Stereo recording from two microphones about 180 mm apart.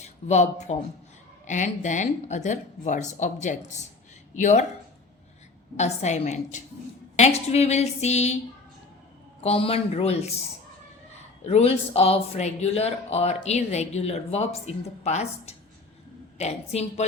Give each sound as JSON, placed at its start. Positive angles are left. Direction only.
{"t": 0.0, "sound": "a woman's voice", "side_deg": 40}
{"t": 5.7, "sound": "speech", "side_deg": 40}
{"t": 9.4, "sound": "speech", "side_deg": 35}
{"t": 11.4, "sound": "speech", "side_deg": 35}